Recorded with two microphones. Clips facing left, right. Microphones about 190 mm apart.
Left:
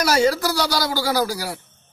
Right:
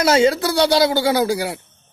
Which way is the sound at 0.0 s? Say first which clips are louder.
Right 3 dB; 25° right (ahead or behind).